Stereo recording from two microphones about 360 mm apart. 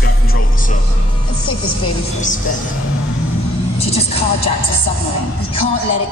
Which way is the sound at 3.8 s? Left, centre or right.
Centre.